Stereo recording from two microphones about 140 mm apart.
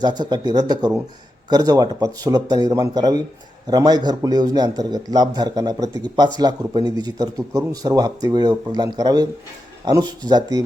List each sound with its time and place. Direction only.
0.0 s a man's voice: 30° right (ahead or behind)